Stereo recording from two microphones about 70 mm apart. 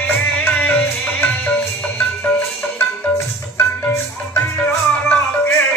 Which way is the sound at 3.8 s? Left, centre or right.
Left.